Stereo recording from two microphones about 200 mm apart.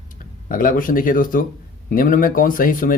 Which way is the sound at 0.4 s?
45° left (ahead or behind).